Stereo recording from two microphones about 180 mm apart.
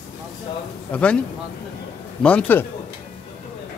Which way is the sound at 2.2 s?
5° left (ahead or behind).